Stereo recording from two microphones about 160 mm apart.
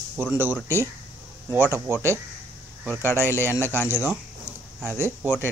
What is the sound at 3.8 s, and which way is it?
Speech, 15° right (ahead or behind).